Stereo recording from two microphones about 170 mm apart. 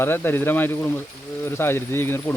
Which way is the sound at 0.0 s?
10° left (ahead or behind).